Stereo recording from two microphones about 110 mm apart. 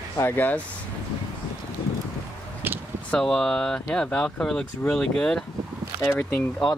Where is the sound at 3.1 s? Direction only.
5° left (ahead or behind).